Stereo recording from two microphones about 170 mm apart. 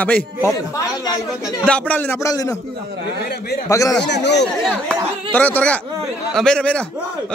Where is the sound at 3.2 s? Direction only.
70° left (ahead or behind).